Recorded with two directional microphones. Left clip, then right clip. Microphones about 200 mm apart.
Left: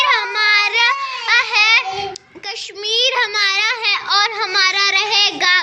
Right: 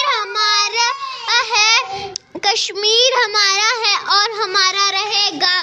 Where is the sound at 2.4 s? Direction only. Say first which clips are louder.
Right 9 dB; 65° right (ahead or behind).